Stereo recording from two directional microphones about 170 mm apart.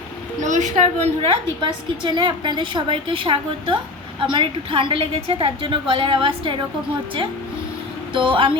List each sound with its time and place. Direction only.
0.4 s a woman's voice: 45° right (ahead or behind); by 6.6 s 30° right (ahead or behind)
8.1 s a woman's voice: 30° right (ahead or behind)